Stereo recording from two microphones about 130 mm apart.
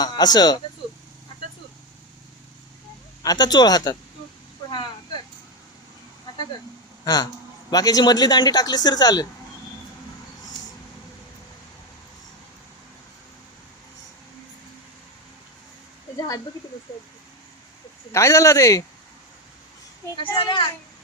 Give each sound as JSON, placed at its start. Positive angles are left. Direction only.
{"t": 0.0, "sound": "speech", "side_deg": 30}
{"t": 3.2, "sound": "speech", "side_deg": 30}
{"t": 4.7, "sound": "a sound", "side_deg": 35}
{"t": 7.0, "sound": "speech", "side_deg": 30}
{"t": 18.1, "sound": "speech", "side_deg": 20}
{"t": 20.3, "sound": "speech", "side_deg": 40}